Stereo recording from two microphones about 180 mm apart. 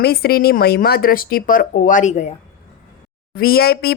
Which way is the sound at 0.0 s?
60° left (ahead or behind).